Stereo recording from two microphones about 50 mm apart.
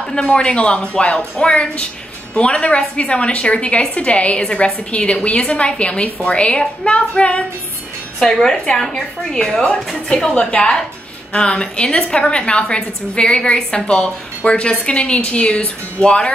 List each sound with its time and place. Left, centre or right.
0.1 s a woman's voice: centre
8.2 s a woman's voice: centre